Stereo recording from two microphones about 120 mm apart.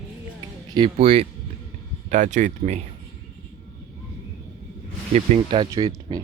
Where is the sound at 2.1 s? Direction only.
90° right.